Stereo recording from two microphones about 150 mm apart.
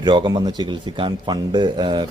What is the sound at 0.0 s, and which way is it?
Speech, 30° right (ahead or behind).